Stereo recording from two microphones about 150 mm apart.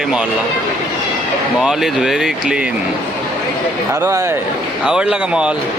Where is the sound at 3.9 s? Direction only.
20° right (ahead or behind).